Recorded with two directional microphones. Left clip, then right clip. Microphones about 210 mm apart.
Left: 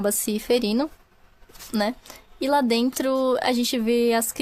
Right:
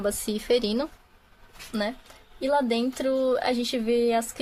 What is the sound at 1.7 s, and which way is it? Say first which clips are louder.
Speech: left 4 dB; 45° left (ahead or behind).